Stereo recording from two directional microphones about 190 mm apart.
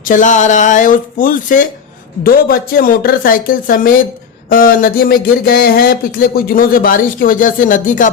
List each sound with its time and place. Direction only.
0.0 s speech: 45° left (ahead or behind)